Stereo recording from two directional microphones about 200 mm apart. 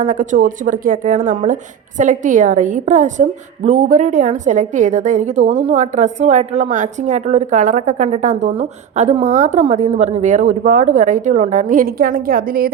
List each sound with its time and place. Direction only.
0.0 s a woman's voice: 40° right (ahead or behind)